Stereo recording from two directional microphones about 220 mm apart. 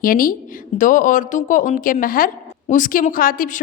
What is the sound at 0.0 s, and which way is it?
A woman's voice, 40° left (ahead or behind).